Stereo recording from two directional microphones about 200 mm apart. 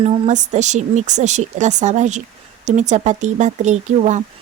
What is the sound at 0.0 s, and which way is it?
Speech, 35° right (ahead or behind).